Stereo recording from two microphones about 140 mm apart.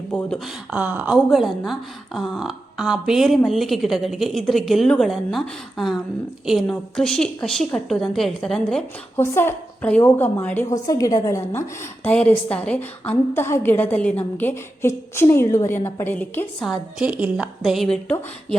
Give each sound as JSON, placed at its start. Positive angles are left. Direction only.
{"t": 0.4, "sound": "a woman's voice", "side_deg": -10}
{"t": 9.1, "sound": "a woman's voice", "side_deg": 15}
{"t": 10.8, "sound": "a woman's voice", "side_deg": 25}
{"t": 12.0, "sound": "a woman's voice", "side_deg": 10}
{"t": 16.6, "sound": "a woman's voice", "side_deg": 0}